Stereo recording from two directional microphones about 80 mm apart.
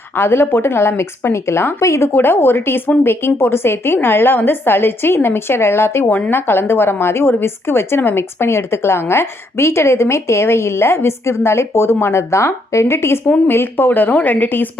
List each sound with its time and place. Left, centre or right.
0.2 s a woman's voice: left